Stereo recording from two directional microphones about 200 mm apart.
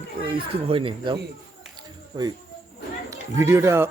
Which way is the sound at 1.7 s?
20° right (ahead or behind).